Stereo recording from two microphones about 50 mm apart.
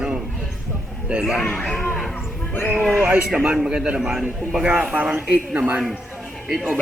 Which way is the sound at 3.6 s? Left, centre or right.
Centre.